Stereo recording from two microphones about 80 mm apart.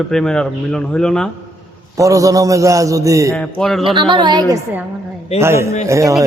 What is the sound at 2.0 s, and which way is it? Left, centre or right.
A man's voice, right.